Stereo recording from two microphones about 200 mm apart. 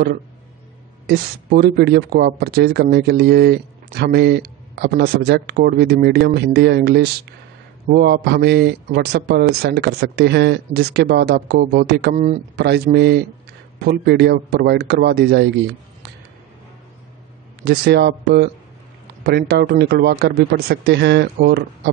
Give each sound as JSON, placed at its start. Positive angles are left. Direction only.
{"t": 1.0, "sound": "speech", "side_deg": -50}
{"t": 17.6, "sound": "speech", "side_deg": -55}